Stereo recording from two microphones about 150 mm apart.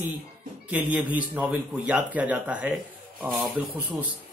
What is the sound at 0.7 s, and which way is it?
Speech, 10° right (ahead or behind).